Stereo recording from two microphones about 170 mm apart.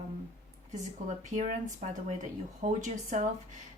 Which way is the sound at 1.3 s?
45° right (ahead or behind).